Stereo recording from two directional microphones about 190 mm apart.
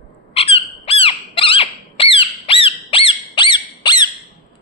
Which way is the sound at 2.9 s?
30° left (ahead or behind).